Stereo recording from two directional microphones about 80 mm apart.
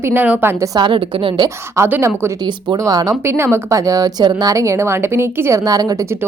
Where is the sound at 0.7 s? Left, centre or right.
Right.